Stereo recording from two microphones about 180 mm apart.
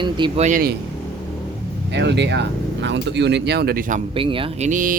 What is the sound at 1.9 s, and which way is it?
Speech, 75° right (ahead or behind).